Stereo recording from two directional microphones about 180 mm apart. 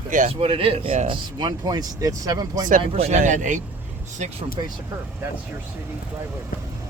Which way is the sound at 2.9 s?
35° right (ahead or behind).